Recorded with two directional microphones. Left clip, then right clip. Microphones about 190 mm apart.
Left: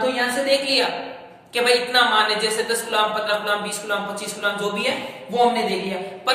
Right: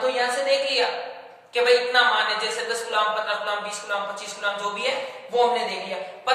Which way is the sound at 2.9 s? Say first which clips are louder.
Left 2 dB; 5° left (ahead or behind).